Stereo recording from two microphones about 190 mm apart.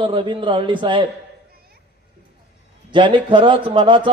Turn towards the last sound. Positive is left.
turn(degrees=-25)  # may be behind; listen again after turning